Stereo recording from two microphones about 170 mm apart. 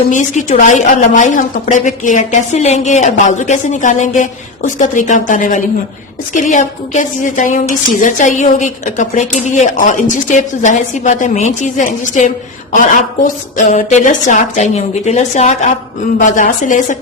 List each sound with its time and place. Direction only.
0.1 s a woman's voice: 50° left (ahead or behind)